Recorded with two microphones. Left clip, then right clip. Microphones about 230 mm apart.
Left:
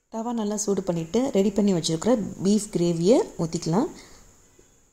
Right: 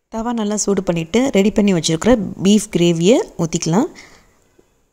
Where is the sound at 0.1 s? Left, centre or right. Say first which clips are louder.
Right 7 dB; right.